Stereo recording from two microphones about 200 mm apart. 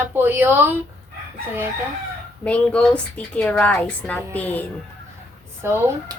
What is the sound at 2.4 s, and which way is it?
A woman's voice, 5° left (ahead or behind).